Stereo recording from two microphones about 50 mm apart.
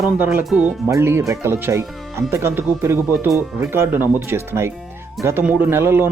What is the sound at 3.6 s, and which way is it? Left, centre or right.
Speech, right.